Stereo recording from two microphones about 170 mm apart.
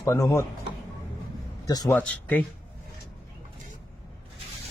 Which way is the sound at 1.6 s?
20° left (ahead or behind).